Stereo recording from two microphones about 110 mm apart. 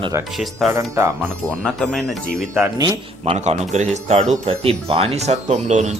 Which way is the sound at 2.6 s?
30° right (ahead or behind).